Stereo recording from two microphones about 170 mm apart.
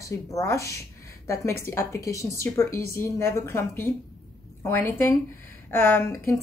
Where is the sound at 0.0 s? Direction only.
20° left (ahead or behind).